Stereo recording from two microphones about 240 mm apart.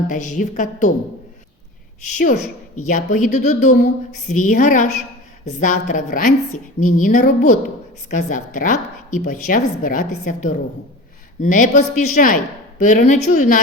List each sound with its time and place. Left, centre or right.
0.1 s a woman's voice: left
2.1 s a woman's voice: left